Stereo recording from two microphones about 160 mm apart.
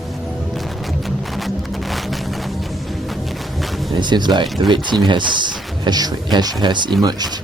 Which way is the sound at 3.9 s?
30° right (ahead or behind).